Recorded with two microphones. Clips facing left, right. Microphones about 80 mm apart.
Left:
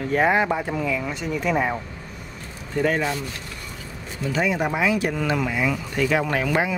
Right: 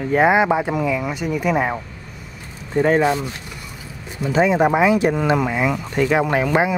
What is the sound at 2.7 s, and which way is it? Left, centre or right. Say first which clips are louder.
Speech: right 6 dB; right.